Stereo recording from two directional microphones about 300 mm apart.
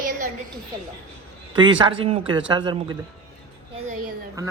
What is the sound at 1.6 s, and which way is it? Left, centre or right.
A man's voice, centre.